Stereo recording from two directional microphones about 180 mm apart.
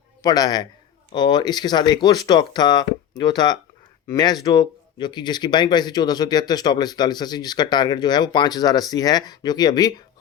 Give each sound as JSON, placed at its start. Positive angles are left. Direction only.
{"t": 0.2, "sound": "speech", "side_deg": 20}